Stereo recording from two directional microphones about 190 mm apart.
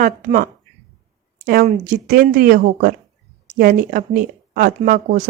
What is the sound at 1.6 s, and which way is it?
Speech, 45° right (ahead or behind).